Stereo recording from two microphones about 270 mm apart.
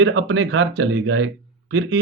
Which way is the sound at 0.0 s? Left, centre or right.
Right.